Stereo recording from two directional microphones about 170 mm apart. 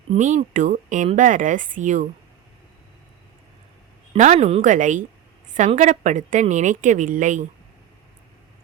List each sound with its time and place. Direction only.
0.1 s speech: 45° right (ahead or behind)
4.1 s speech: 40° right (ahead or behind)